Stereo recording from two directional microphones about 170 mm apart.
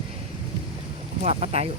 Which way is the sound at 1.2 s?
35° right (ahead or behind).